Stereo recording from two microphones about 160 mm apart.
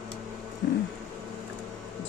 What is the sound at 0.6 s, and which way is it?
Music, 85° left.